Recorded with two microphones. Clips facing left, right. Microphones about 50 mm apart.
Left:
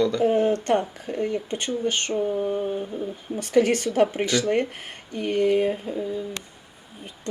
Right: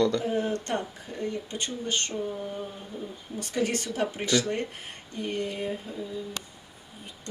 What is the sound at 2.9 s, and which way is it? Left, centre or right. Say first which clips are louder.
Speech: left 7 dB; left.